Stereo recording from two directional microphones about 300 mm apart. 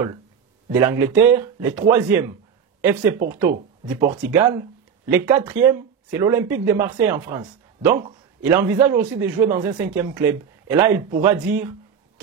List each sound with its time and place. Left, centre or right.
0.7 s speech: centre
10.9 s speech: right
11.2 s speech: centre